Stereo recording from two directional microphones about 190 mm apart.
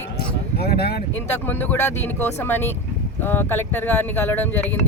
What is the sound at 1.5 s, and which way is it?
Speech, 10° left (ahead or behind).